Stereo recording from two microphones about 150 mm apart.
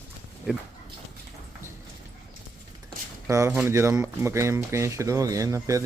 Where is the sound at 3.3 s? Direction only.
20° right (ahead or behind).